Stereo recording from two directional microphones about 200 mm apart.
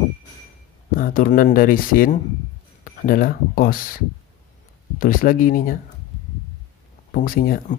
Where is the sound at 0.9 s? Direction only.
45° left (ahead or behind).